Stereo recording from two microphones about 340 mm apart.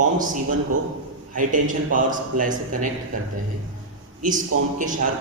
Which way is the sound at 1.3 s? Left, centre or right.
Right.